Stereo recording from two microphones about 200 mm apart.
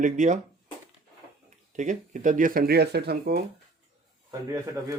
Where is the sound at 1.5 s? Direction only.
35° right (ahead or behind); by 3.3 s 55° right (ahead or behind).